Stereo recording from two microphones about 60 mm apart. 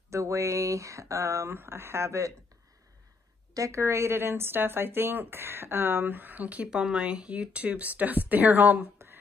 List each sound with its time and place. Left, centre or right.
0.1 s speech: right
1.6 s speech: right
3.5 s speech: right
3.8 s speech: right
6.7 s speech: centre; by 8.8 s right
8.9 s a sound: right